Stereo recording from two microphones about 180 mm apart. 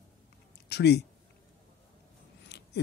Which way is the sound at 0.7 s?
65° left (ahead or behind).